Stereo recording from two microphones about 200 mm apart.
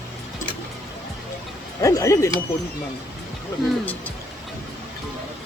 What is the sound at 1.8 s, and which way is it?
Speech, 15° left (ahead or behind).